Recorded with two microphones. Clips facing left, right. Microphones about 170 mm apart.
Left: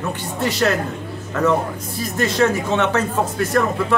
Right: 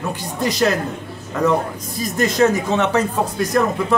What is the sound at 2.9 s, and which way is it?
Speech, 15° right (ahead or behind).